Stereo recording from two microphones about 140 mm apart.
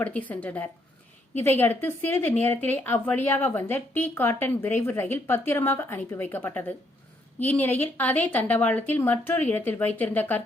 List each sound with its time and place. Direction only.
0.0 s a woman's voice: 10° left (ahead or behind)